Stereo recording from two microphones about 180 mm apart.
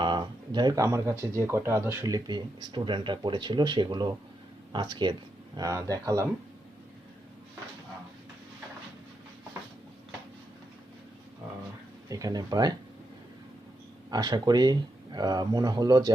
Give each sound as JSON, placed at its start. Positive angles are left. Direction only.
{"t": 0.0, "sound": "speech", "side_deg": -25}
{"t": 12.0, "sound": "speech", "side_deg": -20}
{"t": 14.1, "sound": "speech", "side_deg": -20}